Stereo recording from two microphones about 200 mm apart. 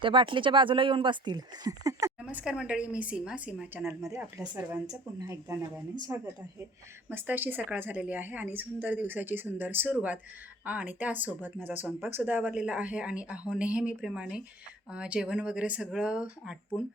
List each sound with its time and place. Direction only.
0.0 s speech: 25° right (ahead or behind)
2.2 s a woman's voice: 5° right (ahead or behind)